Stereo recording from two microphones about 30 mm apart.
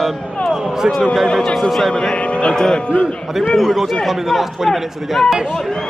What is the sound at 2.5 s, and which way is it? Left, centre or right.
Speech, left.